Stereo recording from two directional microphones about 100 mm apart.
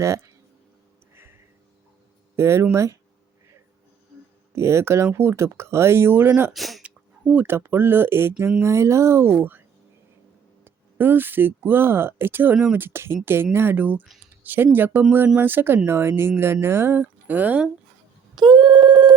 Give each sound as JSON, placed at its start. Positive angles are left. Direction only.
{"t": 1.1, "sound": "a sound", "side_deg": -25}
{"t": 2.3, "sound": "speech", "side_deg": -25}
{"t": 4.5, "sound": "speech", "side_deg": -25}
{"t": 6.5, "sound": "speech", "side_deg": 0}
{"t": 6.8, "sound": "speech", "side_deg": -15}
{"t": 18.3, "sound": "telephone", "side_deg": -45}